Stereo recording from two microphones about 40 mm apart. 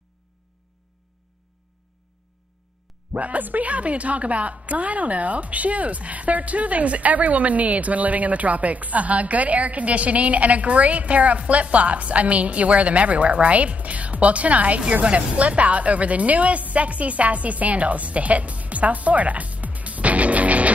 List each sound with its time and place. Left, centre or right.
3.2 s a woman's voice: right